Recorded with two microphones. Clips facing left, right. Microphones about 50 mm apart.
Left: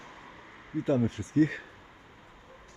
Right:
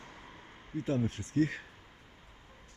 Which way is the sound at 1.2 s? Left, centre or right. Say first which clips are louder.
Left 5 dB; left.